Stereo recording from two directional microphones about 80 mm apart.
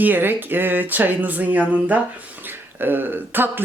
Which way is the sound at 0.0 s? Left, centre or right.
Right.